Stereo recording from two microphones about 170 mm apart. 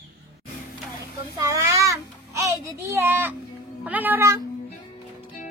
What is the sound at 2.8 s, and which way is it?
Speech, 15° right (ahead or behind).